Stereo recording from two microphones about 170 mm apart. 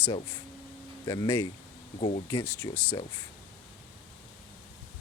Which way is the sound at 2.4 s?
10° left (ahead or behind).